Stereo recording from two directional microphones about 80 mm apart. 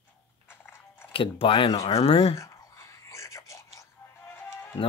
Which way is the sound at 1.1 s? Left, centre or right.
Left.